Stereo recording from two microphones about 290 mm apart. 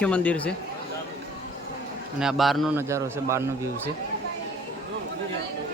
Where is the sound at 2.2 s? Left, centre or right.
Centre.